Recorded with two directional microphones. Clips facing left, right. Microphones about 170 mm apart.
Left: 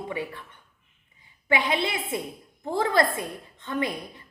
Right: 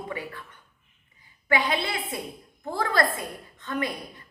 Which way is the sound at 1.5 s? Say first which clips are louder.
Left 1 dB; 20° left (ahead or behind).